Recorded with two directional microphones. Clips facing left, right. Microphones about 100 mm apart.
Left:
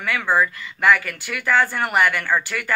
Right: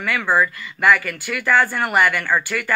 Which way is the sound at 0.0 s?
45° right (ahead or behind).